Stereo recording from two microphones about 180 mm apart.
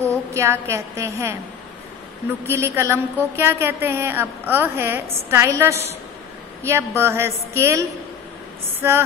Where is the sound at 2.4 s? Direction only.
15° right (ahead or behind).